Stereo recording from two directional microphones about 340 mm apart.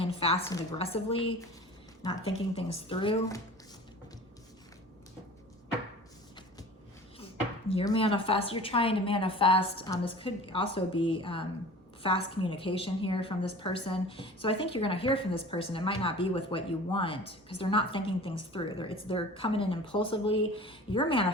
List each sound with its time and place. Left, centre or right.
0.2 s a woman's voice: centre
7.7 s a woman's voice: centre